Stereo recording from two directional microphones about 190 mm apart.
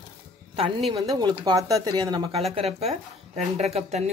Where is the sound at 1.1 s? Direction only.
20° right (ahead or behind).